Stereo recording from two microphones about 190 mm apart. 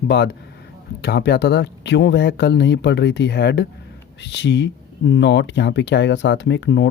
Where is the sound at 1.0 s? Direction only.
60° left (ahead or behind).